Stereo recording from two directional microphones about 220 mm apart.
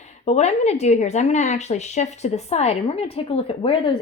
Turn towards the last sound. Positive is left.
turn(degrees=25)  # may be behind; listen again after turning